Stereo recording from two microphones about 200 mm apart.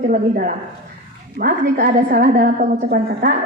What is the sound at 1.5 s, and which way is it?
A woman's voice, 45° right (ahead or behind).